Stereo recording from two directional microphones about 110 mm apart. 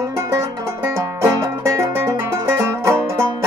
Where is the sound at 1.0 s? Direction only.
25° right (ahead or behind).